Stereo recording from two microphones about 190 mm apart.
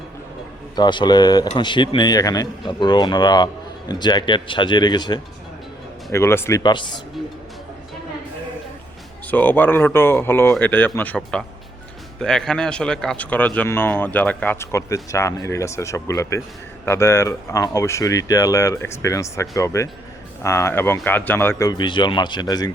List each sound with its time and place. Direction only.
0.8 s speech: 25° left (ahead or behind)
6.6 s speech: 25° left (ahead or behind)
9.2 s speech: 10° left (ahead or behind)